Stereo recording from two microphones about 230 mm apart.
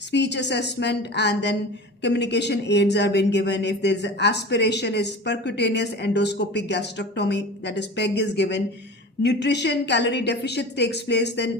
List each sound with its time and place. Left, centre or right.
0.1 s speech: left